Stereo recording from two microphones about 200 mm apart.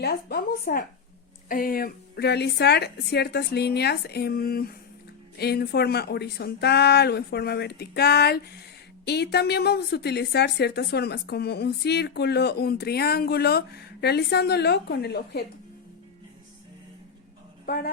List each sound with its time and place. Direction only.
0.0 s a woman's voice: 50° left (ahead or behind)